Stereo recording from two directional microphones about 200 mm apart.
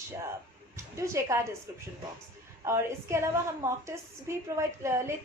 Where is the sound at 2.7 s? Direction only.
15° right (ahead or behind).